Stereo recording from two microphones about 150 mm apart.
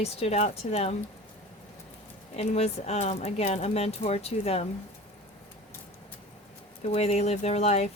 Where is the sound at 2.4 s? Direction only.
45° left (ahead or behind).